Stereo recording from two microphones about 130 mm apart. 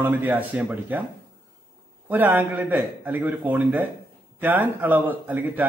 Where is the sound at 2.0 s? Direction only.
15° right (ahead or behind).